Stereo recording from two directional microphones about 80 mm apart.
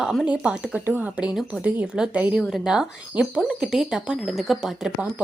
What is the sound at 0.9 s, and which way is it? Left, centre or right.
Speech, right.